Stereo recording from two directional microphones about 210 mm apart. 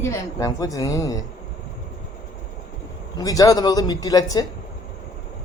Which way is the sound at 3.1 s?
15° left (ahead or behind).